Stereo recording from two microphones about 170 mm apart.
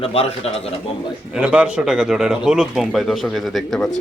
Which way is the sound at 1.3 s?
5° right (ahead or behind).